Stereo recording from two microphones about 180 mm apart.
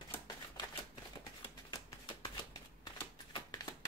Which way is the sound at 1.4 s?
25° left (ahead or behind).